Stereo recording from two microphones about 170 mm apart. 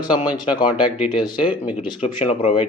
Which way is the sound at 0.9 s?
5° right (ahead or behind).